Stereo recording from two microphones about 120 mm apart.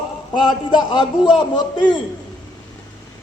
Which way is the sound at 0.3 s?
35° left (ahead or behind).